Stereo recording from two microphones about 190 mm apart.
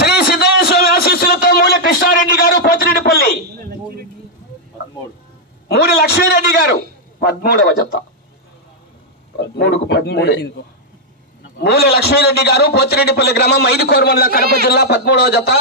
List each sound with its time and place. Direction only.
0.0 s a sound: 55° left (ahead or behind)
5.7 s a man's voice: 55° left (ahead or behind)
9.6 s a man's voice: 60° left (ahead or behind)
11.6 s a man's voice: 55° left (ahead or behind)